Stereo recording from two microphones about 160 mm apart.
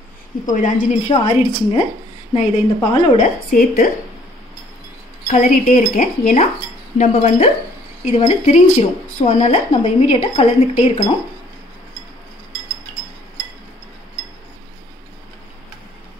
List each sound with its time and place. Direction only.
0.5 s speech: 50° left (ahead or behind)
1.1 s speech: 35° left (ahead or behind)
3.2 s a woman's voice: 60° left (ahead or behind)
5.3 s speech: 55° left (ahead or behind)